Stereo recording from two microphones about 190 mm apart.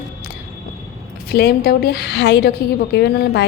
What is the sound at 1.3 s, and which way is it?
A woman's voice, 55° left (ahead or behind).